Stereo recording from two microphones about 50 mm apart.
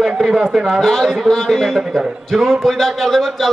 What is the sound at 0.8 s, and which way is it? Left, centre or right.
A man's voice, centre.